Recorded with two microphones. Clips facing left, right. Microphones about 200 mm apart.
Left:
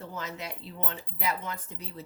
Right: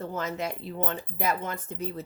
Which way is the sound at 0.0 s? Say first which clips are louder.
Right 7 dB; 50° right (ahead or behind).